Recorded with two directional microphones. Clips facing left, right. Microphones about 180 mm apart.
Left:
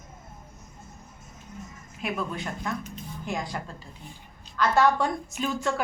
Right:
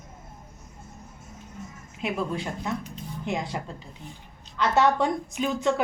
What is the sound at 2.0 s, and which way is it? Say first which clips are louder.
A woman's voice: right 3 dB; 25° right (ahead or behind).